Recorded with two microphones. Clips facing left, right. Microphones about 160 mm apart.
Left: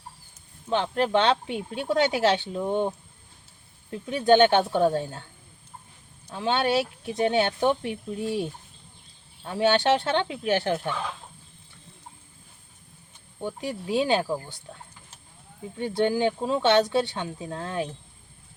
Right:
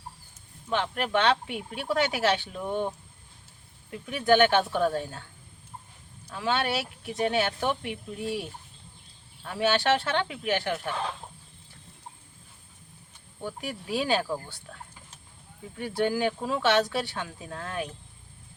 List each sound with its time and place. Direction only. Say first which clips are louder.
0.7 s speech: left 4 dB; 30° left (ahead or behind)
3.9 s speech: left 3 dB; 25° left (ahead or behind)
6.3 s speech: left 4 dB; 25° left (ahead or behind)
13.4 s speech: left 4 dB; 20° left (ahead or behind)
15.8 s speech: left 3 dB; 20° left (ahead or behind)